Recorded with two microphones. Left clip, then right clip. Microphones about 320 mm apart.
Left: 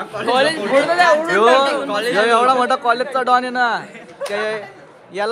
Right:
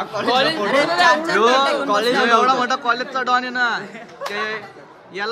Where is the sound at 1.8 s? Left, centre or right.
Right.